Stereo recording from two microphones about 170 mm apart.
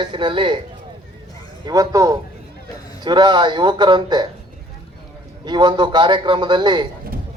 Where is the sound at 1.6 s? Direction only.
20° right (ahead or behind).